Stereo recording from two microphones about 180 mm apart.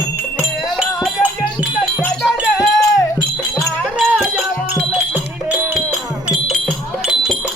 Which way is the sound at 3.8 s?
5° right (ahead or behind).